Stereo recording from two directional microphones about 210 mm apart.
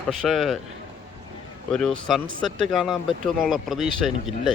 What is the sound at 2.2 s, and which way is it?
Speech, 70° right (ahead or behind).